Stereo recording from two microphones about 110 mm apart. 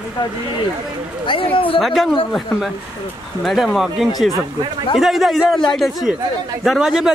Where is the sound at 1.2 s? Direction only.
50° left (ahead or behind).